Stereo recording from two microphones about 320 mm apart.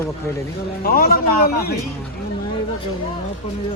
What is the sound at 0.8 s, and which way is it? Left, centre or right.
Speech, left.